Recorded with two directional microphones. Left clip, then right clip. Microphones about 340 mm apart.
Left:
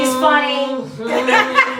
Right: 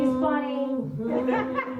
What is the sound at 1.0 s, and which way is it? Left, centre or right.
Laughter, centre.